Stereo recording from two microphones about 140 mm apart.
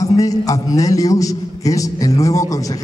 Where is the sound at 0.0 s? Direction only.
25° left (ahead or behind).